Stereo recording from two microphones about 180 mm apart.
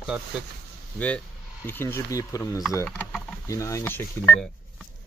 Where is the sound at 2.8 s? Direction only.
5° left (ahead or behind).